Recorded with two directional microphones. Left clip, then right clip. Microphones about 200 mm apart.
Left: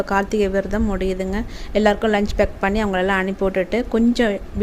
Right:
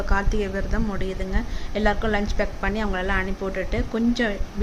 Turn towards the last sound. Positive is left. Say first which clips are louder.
# left 6 dB
turn(degrees=40)  # may be behind; listen again after turning